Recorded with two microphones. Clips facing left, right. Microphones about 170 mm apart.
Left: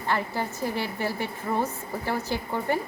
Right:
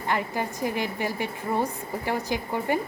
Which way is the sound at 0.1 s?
15° right (ahead or behind).